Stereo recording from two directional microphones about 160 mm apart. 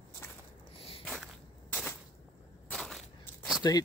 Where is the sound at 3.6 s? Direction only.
25° left (ahead or behind).